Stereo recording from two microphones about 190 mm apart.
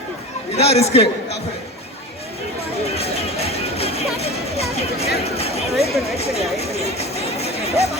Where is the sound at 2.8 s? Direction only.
35° left (ahead or behind).